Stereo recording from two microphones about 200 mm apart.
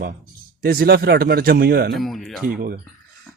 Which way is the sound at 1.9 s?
Centre (ahead or behind).